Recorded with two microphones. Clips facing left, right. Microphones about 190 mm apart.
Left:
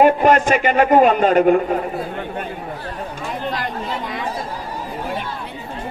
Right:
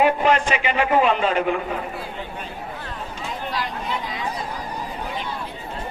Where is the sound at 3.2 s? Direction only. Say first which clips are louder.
Left 2 dB; 50° left (ahead or behind).